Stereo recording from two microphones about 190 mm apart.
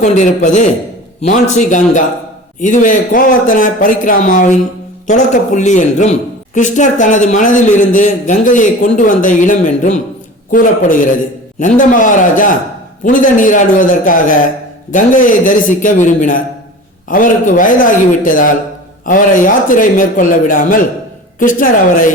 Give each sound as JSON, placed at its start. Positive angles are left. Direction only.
{"t": 0.0, "sound": "a woman's voice", "side_deg": 40}